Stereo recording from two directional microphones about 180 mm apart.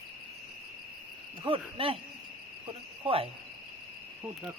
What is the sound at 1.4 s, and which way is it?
Cricket, 30° right (ahead or behind).